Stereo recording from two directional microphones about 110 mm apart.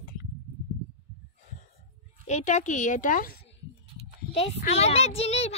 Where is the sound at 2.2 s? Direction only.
90° left.